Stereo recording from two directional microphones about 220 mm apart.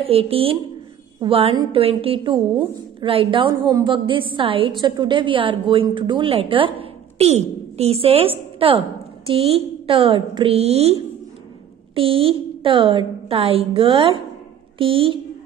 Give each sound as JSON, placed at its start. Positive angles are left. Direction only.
{"t": 0.0, "sound": "a woman's voice", "side_deg": -25}